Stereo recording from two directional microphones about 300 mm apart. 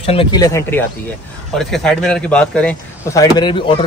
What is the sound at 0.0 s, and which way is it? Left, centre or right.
Speech, centre.